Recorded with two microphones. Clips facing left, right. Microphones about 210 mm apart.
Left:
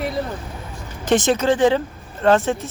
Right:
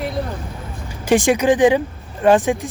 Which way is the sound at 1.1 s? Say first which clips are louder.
Right 2 dB; 10° right (ahead or behind).